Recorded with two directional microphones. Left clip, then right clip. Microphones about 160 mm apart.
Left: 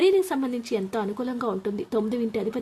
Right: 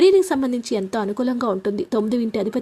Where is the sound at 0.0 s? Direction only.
35° right (ahead or behind).